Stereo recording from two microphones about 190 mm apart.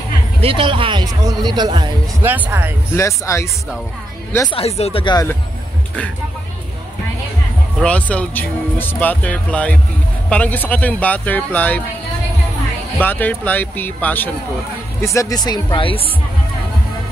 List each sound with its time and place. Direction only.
0.4 s speech: 30° right (ahead or behind)
2.2 s speech: 10° right (ahead or behind)
2.9 s speech: 15° left (ahead or behind)
4.5 s speech: 30° left (ahead or behind)
7.8 s speech: 5° left (ahead or behind)
13.0 s speech: 10° left (ahead or behind); by 16.1 s 30° left (ahead or behind)